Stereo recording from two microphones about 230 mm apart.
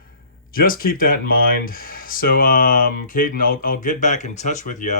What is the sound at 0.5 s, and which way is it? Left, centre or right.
Speech, left.